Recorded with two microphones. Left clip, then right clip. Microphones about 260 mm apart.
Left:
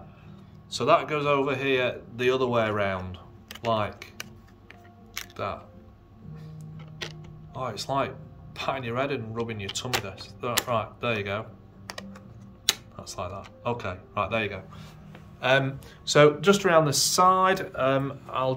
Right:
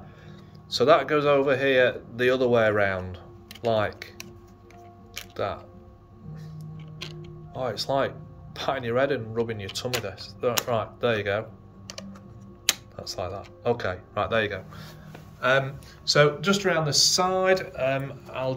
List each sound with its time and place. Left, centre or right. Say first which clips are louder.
0.7 s speech: right 3 dB; centre
5.3 s speech: right 3 dB; centre
6.3 s music: right 2 dB; centre
7.5 s speech: right 2 dB; centre
12.9 s speech: right 3 dB; centre